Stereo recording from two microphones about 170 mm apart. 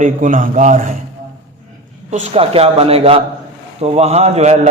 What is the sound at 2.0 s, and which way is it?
A man's voice, 40° right (ahead or behind).